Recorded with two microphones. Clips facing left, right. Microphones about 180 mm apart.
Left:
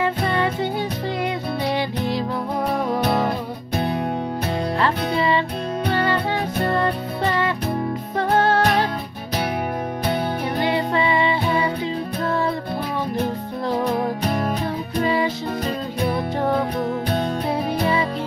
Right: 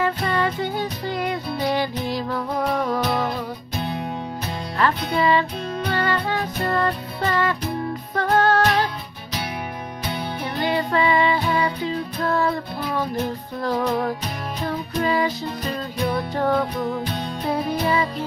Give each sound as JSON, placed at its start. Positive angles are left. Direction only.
{"t": 0.0, "sound": "music", "side_deg": 25}
{"t": 3.0, "sound": "music", "side_deg": 55}
{"t": 4.7, "sound": "music", "side_deg": 30}
{"t": 10.6, "sound": "music", "side_deg": 25}
{"t": 15.0, "sound": "music", "side_deg": 25}
{"t": 16.7, "sound": "music", "side_deg": 55}
{"t": 17.5, "sound": "music", "side_deg": 25}